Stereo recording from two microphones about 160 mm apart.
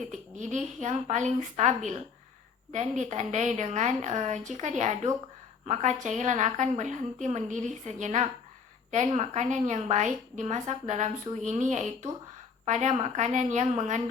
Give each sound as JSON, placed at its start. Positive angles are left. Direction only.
{"t": 0.1, "sound": "a woman's voice", "side_deg": -50}